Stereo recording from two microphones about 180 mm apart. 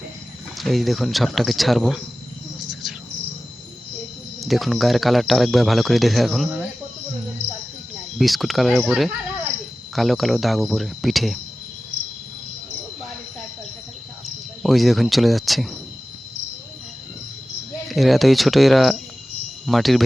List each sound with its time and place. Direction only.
0.6 s speech: centre (ahead or behind)
4.4 s speech: centre (ahead or behind)
8.2 s speech: centre (ahead or behind)
14.3 s speech: centre (ahead or behind)
17.8 s speech: centre (ahead or behind)